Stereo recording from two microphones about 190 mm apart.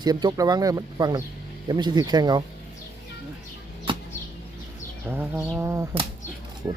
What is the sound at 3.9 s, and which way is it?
Arrow, 25° right (ahead or behind).